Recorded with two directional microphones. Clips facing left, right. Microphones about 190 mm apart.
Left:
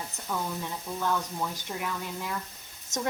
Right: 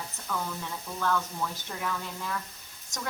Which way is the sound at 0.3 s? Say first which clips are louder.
Left 2 dB; 20° left (ahead or behind).